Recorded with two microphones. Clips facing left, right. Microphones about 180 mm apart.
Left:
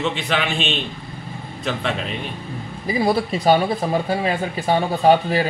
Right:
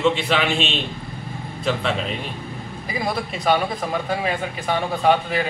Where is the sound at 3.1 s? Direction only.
35° left (ahead or behind).